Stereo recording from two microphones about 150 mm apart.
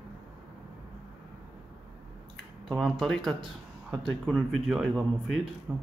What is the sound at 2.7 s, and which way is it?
A man's voice, centre (ahead or behind).